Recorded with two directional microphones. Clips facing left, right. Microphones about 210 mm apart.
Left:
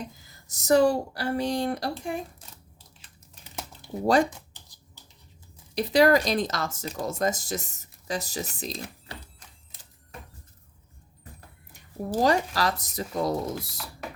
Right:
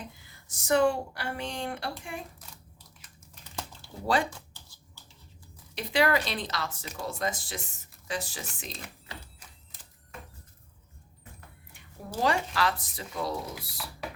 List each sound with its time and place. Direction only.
0.1 s speech: 40° left (ahead or behind)
4.0 s speech: 40° left (ahead or behind)
4.3 s a sound: 20° left (ahead or behind)
5.7 s speech: 40° left (ahead or behind)
11.3 s speech: 40° left (ahead or behind)